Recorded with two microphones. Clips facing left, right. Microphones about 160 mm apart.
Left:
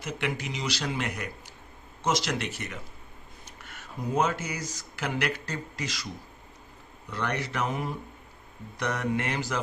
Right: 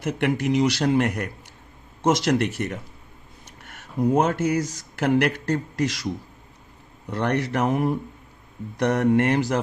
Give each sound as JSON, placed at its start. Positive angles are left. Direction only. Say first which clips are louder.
{"t": 0.0, "sound": "speech", "louder": "right 9 dB", "side_deg": -55}
{"t": 7.1, "sound": "speech", "louder": "right 8 dB", "side_deg": -60}